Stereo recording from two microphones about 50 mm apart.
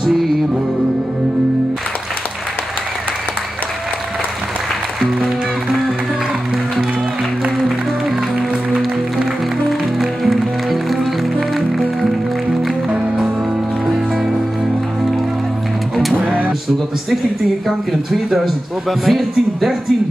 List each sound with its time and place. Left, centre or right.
8.4 s music: centre
9.7 s music: centre
12.9 s music: centre
16.3 s music: right
17.6 s a man's voice: centre